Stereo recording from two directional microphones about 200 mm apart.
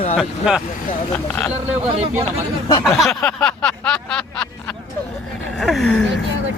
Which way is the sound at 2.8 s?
Centre (ahead or behind).